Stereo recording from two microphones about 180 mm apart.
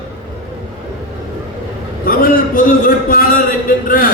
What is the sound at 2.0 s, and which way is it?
A man's voice, 50° left (ahead or behind).